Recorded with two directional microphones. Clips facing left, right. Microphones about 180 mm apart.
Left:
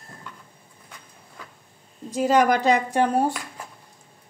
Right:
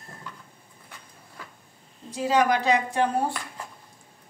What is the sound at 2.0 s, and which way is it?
Speech, 45° left (ahead or behind).